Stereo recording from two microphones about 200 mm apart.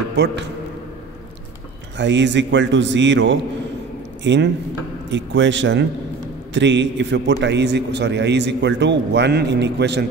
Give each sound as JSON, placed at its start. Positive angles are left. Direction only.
{"t": 0.1, "sound": "a man's voice", "side_deg": -55}
{"t": 2.0, "sound": "a man's voice", "side_deg": -60}